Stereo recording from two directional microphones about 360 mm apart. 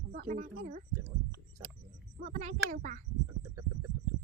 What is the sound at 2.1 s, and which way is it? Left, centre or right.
Speech, right.